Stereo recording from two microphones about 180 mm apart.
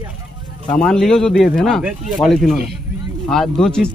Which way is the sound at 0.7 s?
5° left (ahead or behind).